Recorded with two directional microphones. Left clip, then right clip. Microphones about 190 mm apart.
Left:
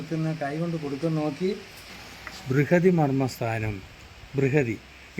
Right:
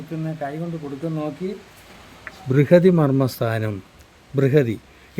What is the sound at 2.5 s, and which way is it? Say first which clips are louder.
Speech: right 7 dB; 55° right (ahead or behind).